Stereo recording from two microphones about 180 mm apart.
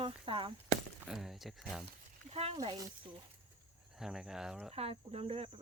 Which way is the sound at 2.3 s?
35° right (ahead or behind).